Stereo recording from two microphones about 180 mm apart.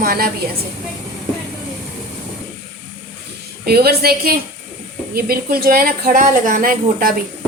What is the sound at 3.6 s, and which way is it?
A woman's voice, 60° right (ahead or behind).